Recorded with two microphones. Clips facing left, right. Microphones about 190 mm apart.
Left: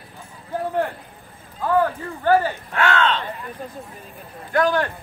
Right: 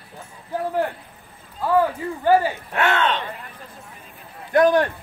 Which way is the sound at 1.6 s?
10° right (ahead or behind).